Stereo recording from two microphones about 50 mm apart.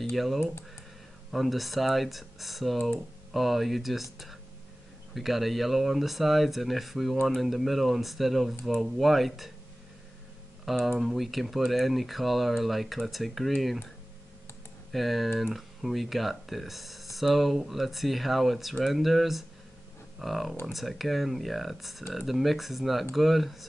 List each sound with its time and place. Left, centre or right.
0.1 s speech: centre
10.6 s speech: centre
14.9 s speech: centre